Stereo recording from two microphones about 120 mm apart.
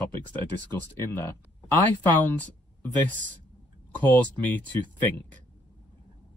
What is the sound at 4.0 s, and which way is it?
Speech, 15° left (ahead or behind).